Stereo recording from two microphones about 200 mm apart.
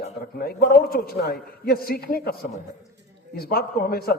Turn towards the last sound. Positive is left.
turn(degrees=50)  # may be behind; listen again after turning